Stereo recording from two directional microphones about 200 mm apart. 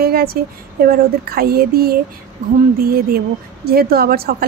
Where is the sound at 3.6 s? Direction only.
50° right (ahead or behind).